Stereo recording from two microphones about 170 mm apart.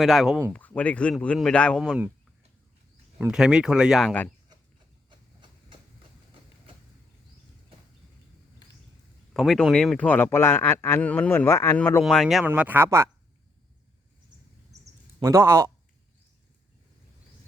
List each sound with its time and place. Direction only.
0.0 s a man's voice: centre (ahead or behind)
3.3 s speech: 5° right (ahead or behind)
5.0 s horse: 30° right (ahead or behind)
9.3 s a man's voice: centre (ahead or behind)
12.0 s speech: centre (ahead or behind)
12.5 s speech: 10° right (ahead or behind)
15.2 s speech: 15° right (ahead or behind)